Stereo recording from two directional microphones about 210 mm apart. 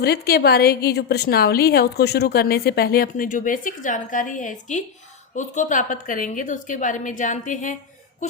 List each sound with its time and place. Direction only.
0.0 s a woman's voice: 50° left (ahead or behind)